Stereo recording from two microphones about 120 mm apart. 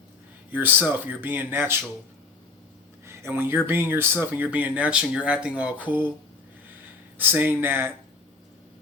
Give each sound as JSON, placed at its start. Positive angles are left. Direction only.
{"t": 0.9, "sound": "speech", "side_deg": -15}
{"t": 3.1, "sound": "speech", "side_deg": -20}
{"t": 7.2, "sound": "speech", "side_deg": -15}